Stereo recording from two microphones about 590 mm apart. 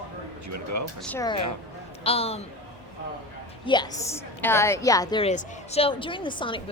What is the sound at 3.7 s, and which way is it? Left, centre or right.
A woman's voice, centre.